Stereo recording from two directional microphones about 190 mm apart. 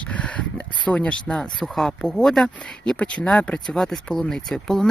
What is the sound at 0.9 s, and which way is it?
Speech, 5° left (ahead or behind).